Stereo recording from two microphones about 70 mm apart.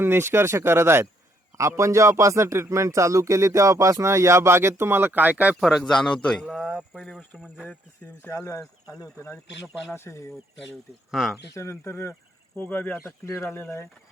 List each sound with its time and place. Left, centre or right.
0.0 s speech: right
5.5 s speech: centre
5.8 s a man's voice: centre
6.5 s speech: centre
6.9 s speech: centre
7.4 s speech: centre
8.3 s speech: left
9.9 s speech: left
11.1 s speech: centre
11.5 s speech: left
12.5 s speech: left
13.2 s speech: left